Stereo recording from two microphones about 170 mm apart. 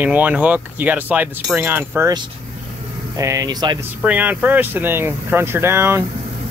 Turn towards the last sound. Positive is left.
turn(degrees=-15)  # may be behind; listen again after turning